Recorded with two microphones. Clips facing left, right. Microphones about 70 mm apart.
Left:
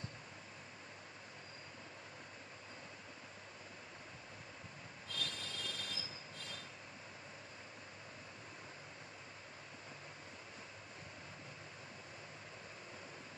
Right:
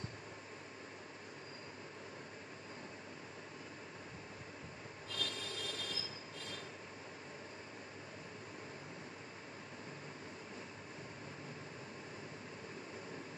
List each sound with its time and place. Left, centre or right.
5.1 s train: right